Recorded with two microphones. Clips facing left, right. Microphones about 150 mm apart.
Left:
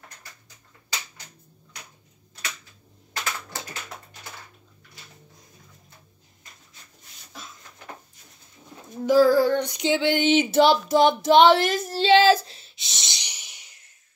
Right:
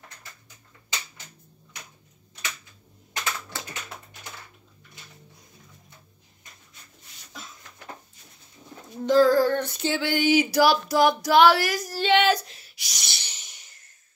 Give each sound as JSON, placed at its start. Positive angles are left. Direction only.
{"t": 9.0, "sound": "child singing", "side_deg": 10}